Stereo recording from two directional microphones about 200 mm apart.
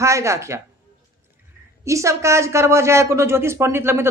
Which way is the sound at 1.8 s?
15° right (ahead or behind).